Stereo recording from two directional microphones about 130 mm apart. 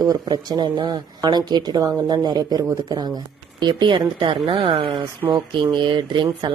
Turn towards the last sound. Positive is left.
turn(degrees=-35)  # may be behind; listen again after turning